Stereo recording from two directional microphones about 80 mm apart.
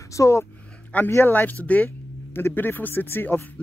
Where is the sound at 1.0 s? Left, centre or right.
Left.